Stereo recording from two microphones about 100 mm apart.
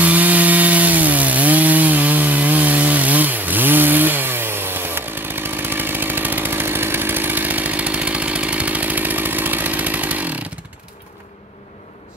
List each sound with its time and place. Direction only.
0.0 s wood: 15° right (ahead or behind)